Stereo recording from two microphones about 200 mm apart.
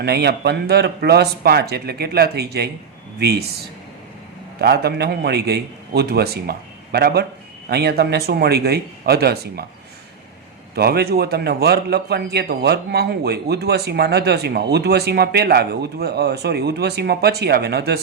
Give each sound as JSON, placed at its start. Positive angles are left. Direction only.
{"t": 0.0, "sound": "a man's voice", "side_deg": -55}
{"t": 4.6, "sound": "a man's voice", "side_deg": -55}
{"t": 10.8, "sound": "a man's voice", "side_deg": -50}